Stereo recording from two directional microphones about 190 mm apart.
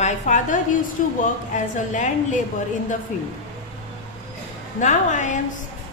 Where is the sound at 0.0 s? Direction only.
40° left (ahead or behind).